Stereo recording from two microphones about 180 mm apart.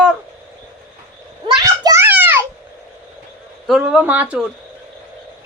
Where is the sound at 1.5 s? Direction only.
20° right (ahead or behind).